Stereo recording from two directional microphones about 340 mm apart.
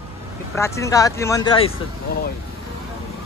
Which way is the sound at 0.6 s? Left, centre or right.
Centre.